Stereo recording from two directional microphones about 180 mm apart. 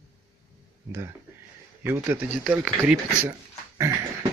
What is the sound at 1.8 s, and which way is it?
Speech, 10° right (ahead or behind).